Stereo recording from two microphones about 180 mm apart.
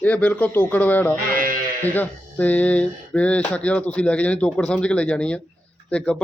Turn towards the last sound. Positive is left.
turn(degrees=5)  # may be behind; listen again after turning